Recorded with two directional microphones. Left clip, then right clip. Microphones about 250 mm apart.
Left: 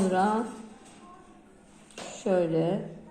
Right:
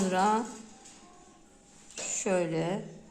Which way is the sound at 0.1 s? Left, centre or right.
Right.